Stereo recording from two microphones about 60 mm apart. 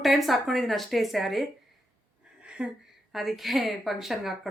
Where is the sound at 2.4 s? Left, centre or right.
Centre.